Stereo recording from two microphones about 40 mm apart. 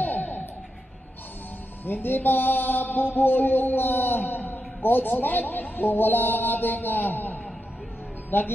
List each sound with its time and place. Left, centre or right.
0.0 s a sound: left
1.9 s a man's voice: left
8.3 s a man's voice: left